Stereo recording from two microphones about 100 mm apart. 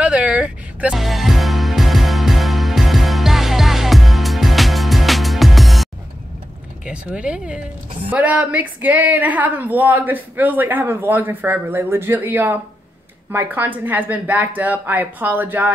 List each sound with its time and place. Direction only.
0.0 s vehicle: 10° right (ahead or behind)
0.9 s music: centre (ahead or behind)
6.9 s speech: 10° right (ahead or behind)